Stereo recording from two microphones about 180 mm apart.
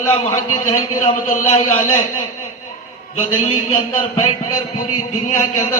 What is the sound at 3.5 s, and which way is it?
Speech, 35° left (ahead or behind).